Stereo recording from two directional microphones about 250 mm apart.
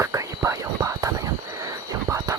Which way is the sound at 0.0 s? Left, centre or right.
Centre.